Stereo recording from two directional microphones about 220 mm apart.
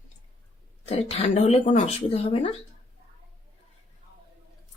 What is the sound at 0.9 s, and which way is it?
Speech, 30° left (ahead or behind).